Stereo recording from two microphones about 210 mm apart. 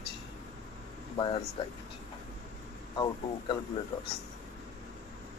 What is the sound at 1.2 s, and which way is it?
Speech, 25° left (ahead or behind).